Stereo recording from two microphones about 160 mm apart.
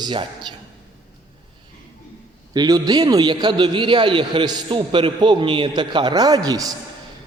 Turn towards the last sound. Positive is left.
turn(degrees=-25)  # may be behind; listen again after turning